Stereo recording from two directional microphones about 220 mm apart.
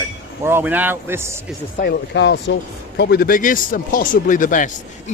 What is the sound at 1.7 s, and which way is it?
Speech, 45° left (ahead or behind).